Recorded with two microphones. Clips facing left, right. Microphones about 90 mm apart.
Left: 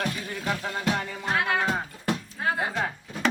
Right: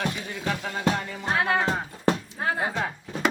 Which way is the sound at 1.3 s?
30° right (ahead or behind).